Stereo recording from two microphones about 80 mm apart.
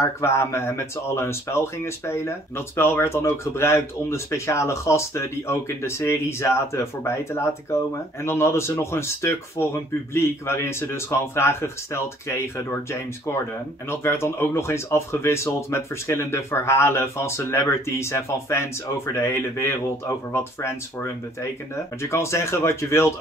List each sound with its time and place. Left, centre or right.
0.2 s speech: left
13.8 s speech: left